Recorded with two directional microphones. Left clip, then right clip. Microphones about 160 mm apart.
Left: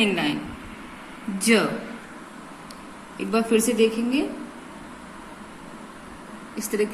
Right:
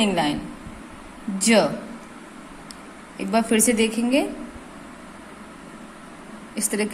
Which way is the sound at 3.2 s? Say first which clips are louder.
Right 1 dB; 40° right (ahead or behind).